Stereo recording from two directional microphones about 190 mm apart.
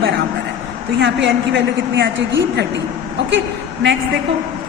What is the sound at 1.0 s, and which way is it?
A woman's voice, 70° right (ahead or behind).